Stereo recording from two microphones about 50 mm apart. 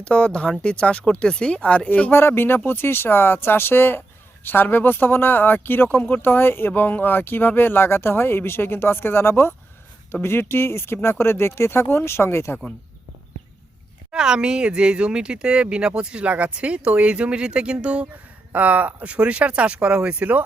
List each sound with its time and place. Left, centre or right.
0.0 s speech: left
2.0 s speech: left
14.1 s speech: centre
18.5 s speech: right